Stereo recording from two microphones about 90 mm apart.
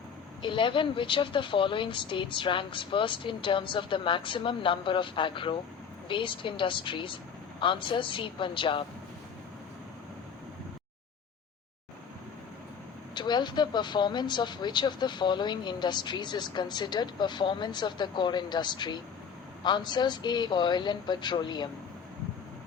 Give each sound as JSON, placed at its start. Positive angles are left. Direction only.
{"t": 0.4, "sound": "a woman's voice", "side_deg": 70}
{"t": 13.1, "sound": "speech", "side_deg": 55}